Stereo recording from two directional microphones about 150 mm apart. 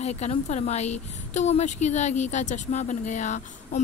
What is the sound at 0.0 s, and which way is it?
A woman's voice, 50° left (ahead or behind).